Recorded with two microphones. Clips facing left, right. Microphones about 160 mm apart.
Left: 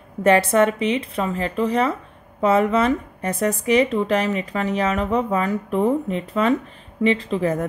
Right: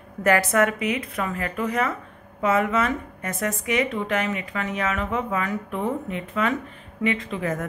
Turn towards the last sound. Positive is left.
turn(degrees=30)  # may be behind; listen again after turning